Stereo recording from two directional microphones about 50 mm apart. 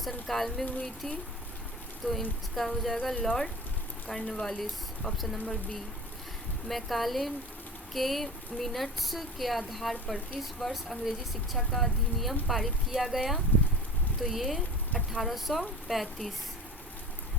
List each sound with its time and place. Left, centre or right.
0.0 s speech: centre
2.0 s speech: centre
2.6 s speech: centre
6.7 s speech: centre